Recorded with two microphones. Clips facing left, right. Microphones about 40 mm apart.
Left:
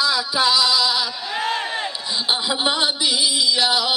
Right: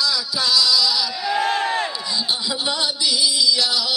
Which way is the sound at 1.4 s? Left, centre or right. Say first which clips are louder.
Right 2 dB; centre.